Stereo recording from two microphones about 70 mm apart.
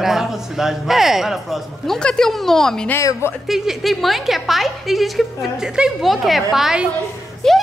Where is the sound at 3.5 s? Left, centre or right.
Centre.